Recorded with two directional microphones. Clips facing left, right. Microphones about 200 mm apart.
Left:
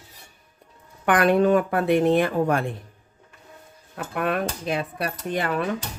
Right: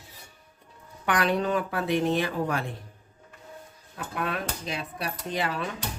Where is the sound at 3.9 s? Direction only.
55° left (ahead or behind).